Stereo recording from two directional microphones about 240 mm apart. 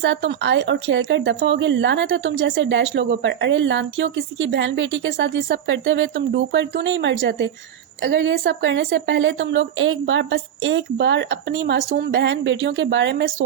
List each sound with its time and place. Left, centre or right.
0.0 s speech: right